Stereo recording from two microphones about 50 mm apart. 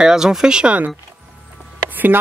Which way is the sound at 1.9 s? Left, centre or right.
Right.